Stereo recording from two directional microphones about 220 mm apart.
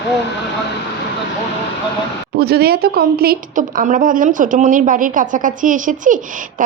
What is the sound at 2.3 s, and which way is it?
Speech, 45° right (ahead or behind).